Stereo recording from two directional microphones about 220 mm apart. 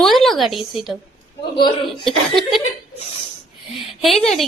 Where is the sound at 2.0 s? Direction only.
Centre (ahead or behind).